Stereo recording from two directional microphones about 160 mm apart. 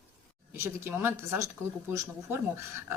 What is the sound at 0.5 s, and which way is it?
Speech, 15° right (ahead or behind).